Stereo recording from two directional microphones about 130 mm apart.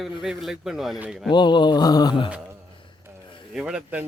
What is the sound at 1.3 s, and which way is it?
Mantra, 35° left (ahead or behind).